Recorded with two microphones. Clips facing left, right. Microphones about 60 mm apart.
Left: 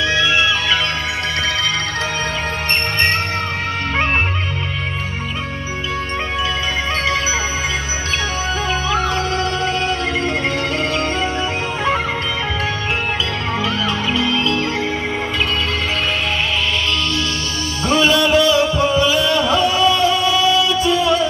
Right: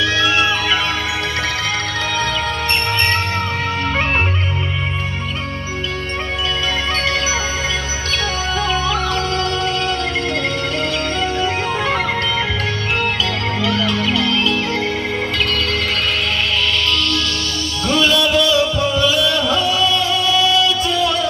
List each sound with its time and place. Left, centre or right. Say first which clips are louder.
0.0 s music: even; left
8.8 s music: even; left
17.8 s music: left 1 dB; left